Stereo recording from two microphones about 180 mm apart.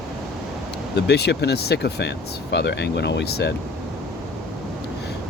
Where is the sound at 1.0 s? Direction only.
65° left (ahead or behind).